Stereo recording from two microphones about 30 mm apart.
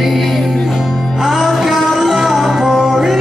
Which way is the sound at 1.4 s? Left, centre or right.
Centre.